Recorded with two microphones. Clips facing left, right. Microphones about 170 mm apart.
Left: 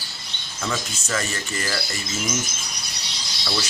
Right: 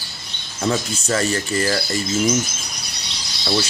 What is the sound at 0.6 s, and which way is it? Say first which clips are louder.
Speech: right 7 dB; 35° right (ahead or behind).